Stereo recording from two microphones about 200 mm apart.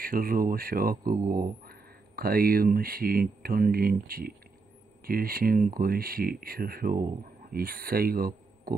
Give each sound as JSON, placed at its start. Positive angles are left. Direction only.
{"t": 0.0, "sound": "speech", "side_deg": -45}